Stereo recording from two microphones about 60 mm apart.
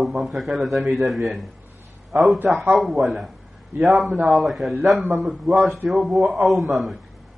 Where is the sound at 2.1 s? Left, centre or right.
Right.